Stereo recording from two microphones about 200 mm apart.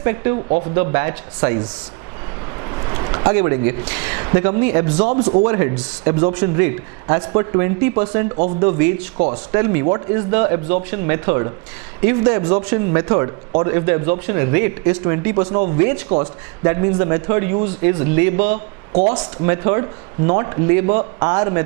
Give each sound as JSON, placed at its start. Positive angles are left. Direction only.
{"t": 0.0, "sound": "speech", "side_deg": -20}
{"t": 2.6, "sound": "a sound", "side_deg": -20}
{"t": 3.8, "sound": "speech", "side_deg": -10}
{"t": 5.5, "sound": "speech", "side_deg": -15}
{"t": 6.1, "sound": "speech", "side_deg": -25}
{"t": 9.6, "sound": "speech", "side_deg": -20}
{"t": 15.4, "sound": "speech", "side_deg": -30}
{"t": 16.6, "sound": "speech", "side_deg": -20}
{"t": 18.3, "sound": "speech", "side_deg": -40}